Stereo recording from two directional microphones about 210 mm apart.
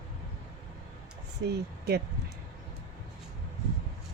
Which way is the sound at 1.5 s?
50° right (ahead or behind).